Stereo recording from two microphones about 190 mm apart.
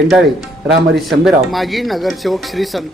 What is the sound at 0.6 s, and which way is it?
Speech, 65° right (ahead or behind).